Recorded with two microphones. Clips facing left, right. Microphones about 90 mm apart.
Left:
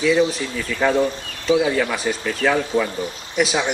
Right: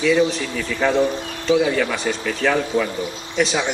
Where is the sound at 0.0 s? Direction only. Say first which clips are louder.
Even; 15° left (ahead or behind).